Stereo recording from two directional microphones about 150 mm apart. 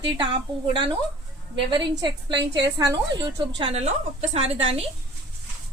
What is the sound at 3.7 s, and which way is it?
A woman's voice, 45° right (ahead or behind).